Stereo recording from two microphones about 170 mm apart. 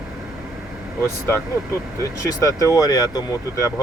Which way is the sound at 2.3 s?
20° left (ahead or behind).